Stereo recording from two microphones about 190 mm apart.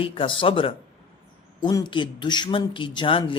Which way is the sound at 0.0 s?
30° left (ahead or behind).